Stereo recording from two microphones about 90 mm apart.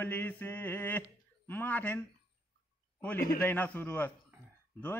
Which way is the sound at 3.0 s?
15° left (ahead or behind).